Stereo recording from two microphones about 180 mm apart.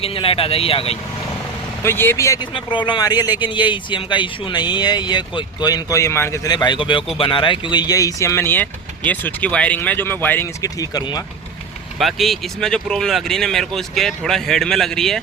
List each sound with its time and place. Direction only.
0.0 s speech: 30° left (ahead or behind)
1.8 s speech: 15° left (ahead or behind)
11.9 s speech: centre (ahead or behind)